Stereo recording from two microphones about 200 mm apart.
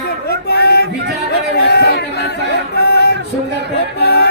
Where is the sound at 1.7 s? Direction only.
55° left (ahead or behind).